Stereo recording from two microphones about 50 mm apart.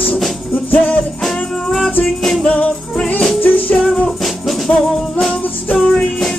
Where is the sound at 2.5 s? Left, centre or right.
Left.